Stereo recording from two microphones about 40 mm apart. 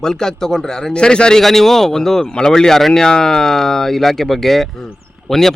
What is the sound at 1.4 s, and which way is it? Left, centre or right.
A man's voice, centre.